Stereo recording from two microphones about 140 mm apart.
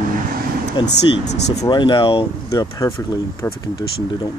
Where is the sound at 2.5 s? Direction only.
25° left (ahead or behind).